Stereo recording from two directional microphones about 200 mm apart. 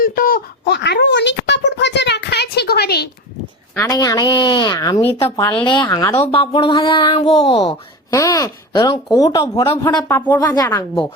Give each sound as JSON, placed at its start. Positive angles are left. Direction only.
{"t": 0.0, "sound": "a sound", "side_deg": 45}
{"t": 3.8, "sound": "speech", "side_deg": 20}
{"t": 5.6, "sound": "speech", "side_deg": 25}
{"t": 6.2, "sound": "speech", "side_deg": 25}
{"t": 8.1, "sound": "speech", "side_deg": 15}